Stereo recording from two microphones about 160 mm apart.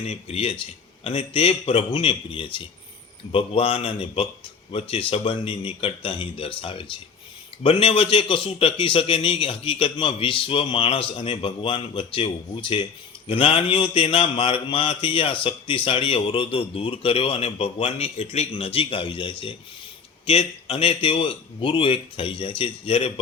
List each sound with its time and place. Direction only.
0.0 s a man's voice: 40° left (ahead or behind)